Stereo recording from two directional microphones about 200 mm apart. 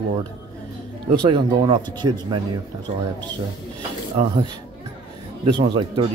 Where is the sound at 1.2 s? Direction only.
25° right (ahead or behind).